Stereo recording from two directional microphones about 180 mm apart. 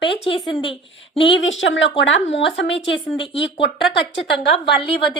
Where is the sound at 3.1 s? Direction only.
30° left (ahead or behind).